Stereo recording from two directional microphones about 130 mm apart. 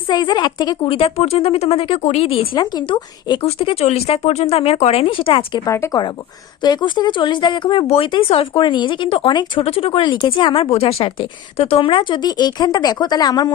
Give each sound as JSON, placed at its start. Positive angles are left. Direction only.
{"t": 0.1, "sound": "speech", "side_deg": 35}
{"t": 2.6, "sound": "speech", "side_deg": 35}
{"t": 5.6, "sound": "speech", "side_deg": 20}
{"t": 6.6, "sound": "speech", "side_deg": 35}